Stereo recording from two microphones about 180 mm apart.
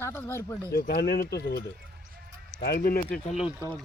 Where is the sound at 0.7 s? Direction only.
65° left (ahead or behind).